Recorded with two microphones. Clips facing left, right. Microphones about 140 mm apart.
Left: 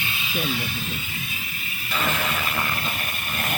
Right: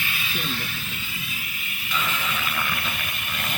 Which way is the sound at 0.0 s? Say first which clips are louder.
Even; 20° left (ahead or behind).